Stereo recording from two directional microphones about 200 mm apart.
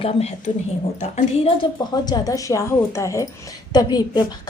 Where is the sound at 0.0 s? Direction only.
30° left (ahead or behind).